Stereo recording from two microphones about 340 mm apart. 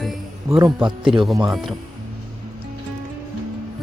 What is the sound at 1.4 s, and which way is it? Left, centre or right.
Speech, centre.